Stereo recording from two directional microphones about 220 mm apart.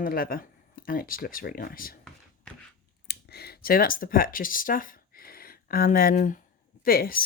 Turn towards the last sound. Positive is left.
turn(degrees=40)  # may be behind; listen again after turning